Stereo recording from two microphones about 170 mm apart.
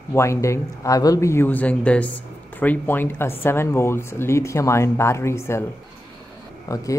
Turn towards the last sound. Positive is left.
turn(degrees=20)  # may be behind; listen again after turning